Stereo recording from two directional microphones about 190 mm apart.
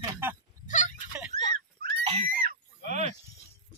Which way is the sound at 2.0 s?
30° right (ahead or behind).